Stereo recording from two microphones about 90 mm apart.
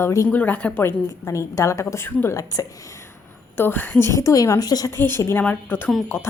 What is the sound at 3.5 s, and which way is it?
A woman's voice, 20° left (ahead or behind).